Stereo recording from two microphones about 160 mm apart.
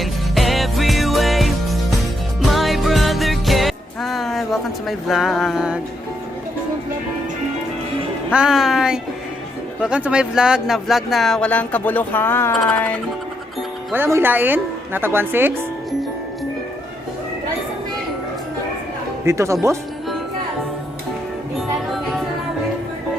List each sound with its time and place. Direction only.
0.0 s music: centre (ahead or behind)
8.3 s speech: 5° right (ahead or behind); by 12.5 s 15° left (ahead or behind)
12.5 s music: 10° left (ahead or behind)
13.9 s a woman's voice: 15° right (ahead or behind)
19.2 s a woman's voice: 15° right (ahead or behind)